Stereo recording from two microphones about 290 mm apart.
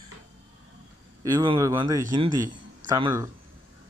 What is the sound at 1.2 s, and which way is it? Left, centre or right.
Speech, centre.